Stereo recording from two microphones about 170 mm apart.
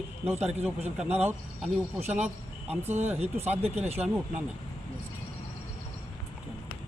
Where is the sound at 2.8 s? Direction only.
10° right (ahead or behind).